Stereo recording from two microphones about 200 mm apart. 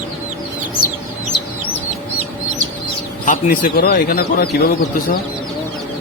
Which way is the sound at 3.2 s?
45° left (ahead or behind).